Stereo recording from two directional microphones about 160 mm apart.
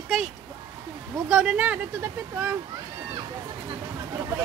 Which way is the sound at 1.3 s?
5° right (ahead or behind).